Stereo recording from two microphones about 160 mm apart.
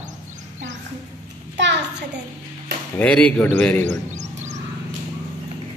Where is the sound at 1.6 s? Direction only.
90° right.